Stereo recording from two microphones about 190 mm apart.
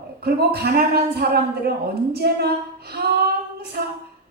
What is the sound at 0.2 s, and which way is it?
A woman's voice, 55° right (ahead or behind).